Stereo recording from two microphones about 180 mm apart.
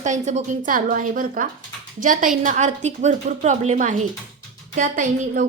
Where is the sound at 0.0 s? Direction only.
40° right (ahead or behind).